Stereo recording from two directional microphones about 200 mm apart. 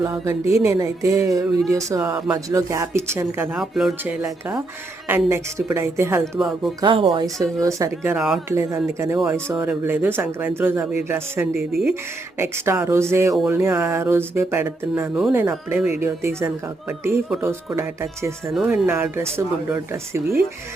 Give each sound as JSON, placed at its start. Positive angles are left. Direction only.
{"t": 0.3, "sound": "speech", "side_deg": -15}
{"t": 6.4, "sound": "speech", "side_deg": 0}
{"t": 6.8, "sound": "speech", "side_deg": -25}
{"t": 11.7, "sound": "speech", "side_deg": 0}
{"t": 12.4, "sound": "speech", "side_deg": -10}